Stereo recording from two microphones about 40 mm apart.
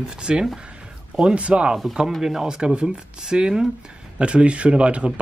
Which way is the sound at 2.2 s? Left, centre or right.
Centre.